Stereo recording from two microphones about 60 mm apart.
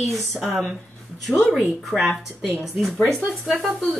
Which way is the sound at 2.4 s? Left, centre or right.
Centre.